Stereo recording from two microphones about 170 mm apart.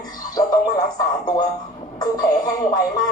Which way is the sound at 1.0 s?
25° left (ahead or behind).